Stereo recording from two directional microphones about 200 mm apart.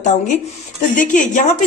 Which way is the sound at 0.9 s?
40° left (ahead or behind).